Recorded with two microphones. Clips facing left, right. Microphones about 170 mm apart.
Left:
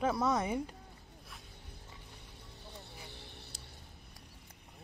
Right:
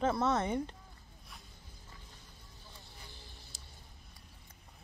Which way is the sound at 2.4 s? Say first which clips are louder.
Left 6 dB; 65° left (ahead or behind).